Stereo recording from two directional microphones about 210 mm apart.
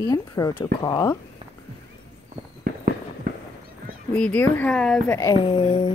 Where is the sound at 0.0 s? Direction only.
15° left (ahead or behind).